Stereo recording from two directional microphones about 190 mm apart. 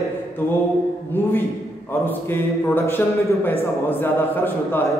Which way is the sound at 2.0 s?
10° left (ahead or behind).